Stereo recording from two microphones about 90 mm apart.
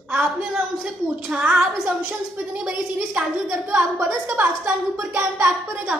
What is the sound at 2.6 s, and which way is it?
A woman's voice, 10° right (ahead or behind).